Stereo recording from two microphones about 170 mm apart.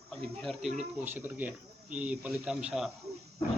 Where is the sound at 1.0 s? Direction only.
10° right (ahead or behind).